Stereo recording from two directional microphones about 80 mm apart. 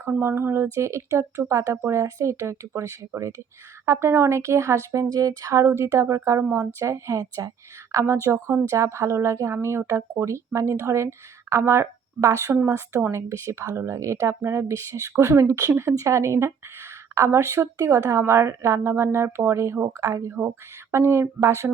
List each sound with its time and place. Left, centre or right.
0.2 s a woman's voice: right
20.0 s a woman's voice: right